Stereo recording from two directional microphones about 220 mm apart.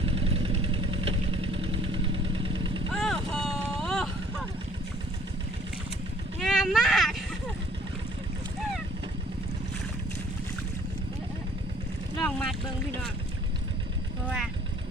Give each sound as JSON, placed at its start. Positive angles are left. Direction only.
{"t": 0.0, "sound": "vehicle", "side_deg": -25}
{"t": 2.9, "sound": "vehicle", "side_deg": 0}
{"t": 3.4, "sound": "a sound", "side_deg": 0}
{"t": 6.4, "sound": "a sound", "side_deg": 0}
{"t": 12.2, "sound": "boat", "side_deg": 5}
{"t": 14.3, "sound": "vehicle", "side_deg": 0}